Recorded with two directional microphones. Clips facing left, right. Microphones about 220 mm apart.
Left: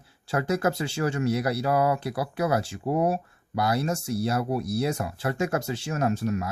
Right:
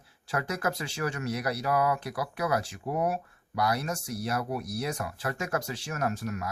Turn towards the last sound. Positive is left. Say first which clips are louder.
# left 6 dB
turn(degrees=25)  # may be behind; listen again after turning